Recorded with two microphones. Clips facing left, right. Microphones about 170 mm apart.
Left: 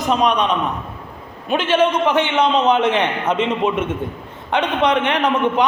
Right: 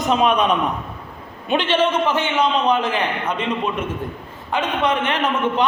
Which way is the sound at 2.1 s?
20° left (ahead or behind).